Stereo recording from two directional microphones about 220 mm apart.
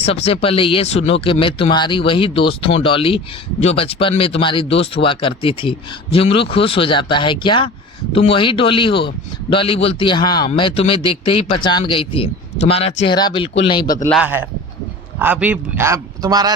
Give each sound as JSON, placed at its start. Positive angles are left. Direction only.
{"t": 0.0, "sound": "speech", "side_deg": 25}
{"t": 14.1, "sound": "a man's voice", "side_deg": -5}